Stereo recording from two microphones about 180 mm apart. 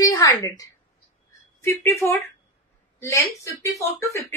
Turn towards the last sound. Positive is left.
turn(degrees=15)  # may be behind; listen again after turning